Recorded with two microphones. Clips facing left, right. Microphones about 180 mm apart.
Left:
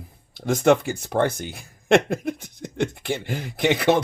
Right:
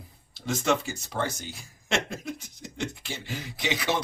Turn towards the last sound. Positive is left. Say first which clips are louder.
# left 9 dB
turn(degrees=55)  # may be behind; listen again after turning